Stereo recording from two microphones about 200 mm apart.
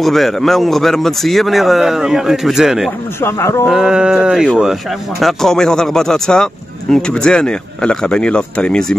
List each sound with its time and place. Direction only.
0.0 s speech: centre (ahead or behind)
3.2 s speech: 10° left (ahead or behind)
3.6 s speech: 5° right (ahead or behind)